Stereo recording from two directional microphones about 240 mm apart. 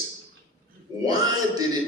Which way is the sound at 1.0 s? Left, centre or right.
Centre.